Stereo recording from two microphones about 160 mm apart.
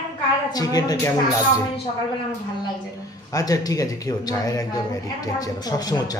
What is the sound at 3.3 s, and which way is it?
Speech, 20° left (ahead or behind).